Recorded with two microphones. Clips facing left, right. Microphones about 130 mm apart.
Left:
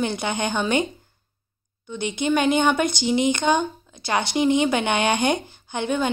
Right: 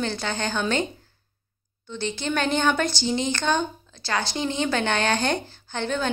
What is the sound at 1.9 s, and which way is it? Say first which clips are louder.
A woman's voice: left 5 dB; 15° left (ahead or behind).